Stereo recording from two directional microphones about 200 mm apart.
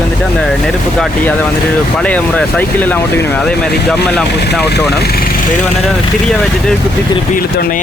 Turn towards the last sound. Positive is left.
turn(degrees=45)  # may be behind; listen again after turning